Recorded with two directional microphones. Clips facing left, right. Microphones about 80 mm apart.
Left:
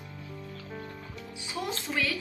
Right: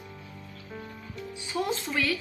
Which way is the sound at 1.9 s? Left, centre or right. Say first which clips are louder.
Left 1 dB; left.